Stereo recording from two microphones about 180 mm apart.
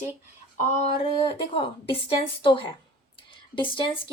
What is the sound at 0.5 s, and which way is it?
A woman's voice, 40° left (ahead or behind).